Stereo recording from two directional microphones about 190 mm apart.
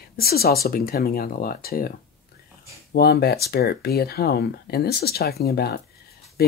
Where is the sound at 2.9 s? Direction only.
55° left (ahead or behind).